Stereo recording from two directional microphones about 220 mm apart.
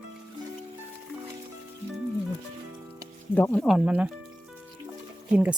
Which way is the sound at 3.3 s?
5° left (ahead or behind).